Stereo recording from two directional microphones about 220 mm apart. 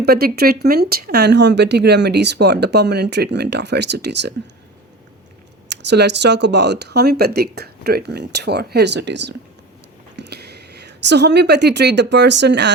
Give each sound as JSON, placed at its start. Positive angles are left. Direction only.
{"t": 0.0, "sound": "speech", "side_deg": -45}
{"t": 5.6, "sound": "speech", "side_deg": -50}